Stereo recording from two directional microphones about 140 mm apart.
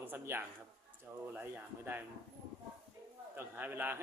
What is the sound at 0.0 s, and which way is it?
A man's voice, 15° right (ahead or behind).